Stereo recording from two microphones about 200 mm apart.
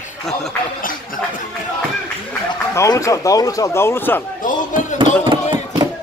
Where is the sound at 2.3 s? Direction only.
15° left (ahead or behind).